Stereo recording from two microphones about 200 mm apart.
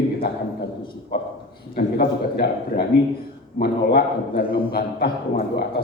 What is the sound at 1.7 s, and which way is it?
A man's voice, 50° left (ahead or behind).